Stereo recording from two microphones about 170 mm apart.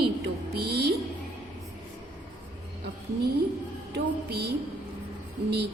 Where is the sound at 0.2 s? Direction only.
70° right (ahead or behind).